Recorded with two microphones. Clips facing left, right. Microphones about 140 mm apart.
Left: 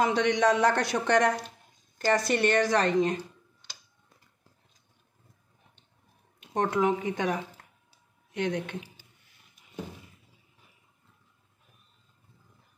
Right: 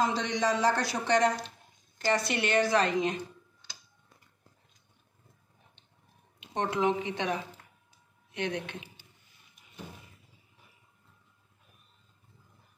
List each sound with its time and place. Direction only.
0.0 s a man's voice: 60° left (ahead or behind)
2.1 s a woman's voice: 40° left (ahead or behind)
6.4 s a woman's voice: 45° left (ahead or behind)